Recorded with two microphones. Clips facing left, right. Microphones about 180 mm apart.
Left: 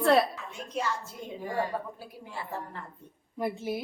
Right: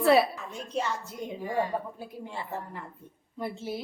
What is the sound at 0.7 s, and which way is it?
A woman's voice, 20° right (ahead or behind).